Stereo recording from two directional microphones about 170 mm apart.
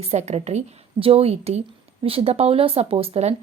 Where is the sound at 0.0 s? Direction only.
40° right (ahead or behind).